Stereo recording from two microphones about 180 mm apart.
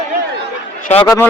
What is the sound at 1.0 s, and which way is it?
Speech, 10° left (ahead or behind).